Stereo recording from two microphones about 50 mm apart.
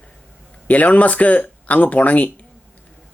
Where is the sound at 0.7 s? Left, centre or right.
Left.